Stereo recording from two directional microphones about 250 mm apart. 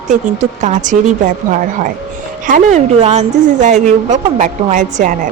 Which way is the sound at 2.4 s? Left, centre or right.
Right.